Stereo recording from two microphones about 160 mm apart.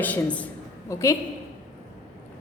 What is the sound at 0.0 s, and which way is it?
A woman's voice, 10° left (ahead or behind).